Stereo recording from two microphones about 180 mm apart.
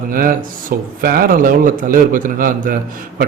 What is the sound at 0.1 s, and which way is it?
A man's voice, 50° right (ahead or behind).